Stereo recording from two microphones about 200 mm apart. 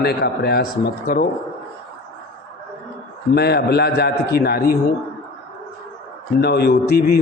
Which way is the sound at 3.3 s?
55° left (ahead or behind).